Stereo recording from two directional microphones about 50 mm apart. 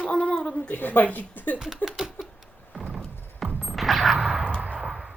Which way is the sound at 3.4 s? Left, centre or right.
Right.